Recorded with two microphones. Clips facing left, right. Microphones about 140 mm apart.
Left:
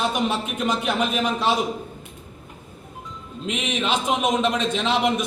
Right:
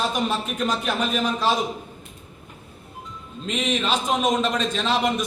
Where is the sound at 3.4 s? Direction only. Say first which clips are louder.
Right 1 dB; 15° left (ahead or behind).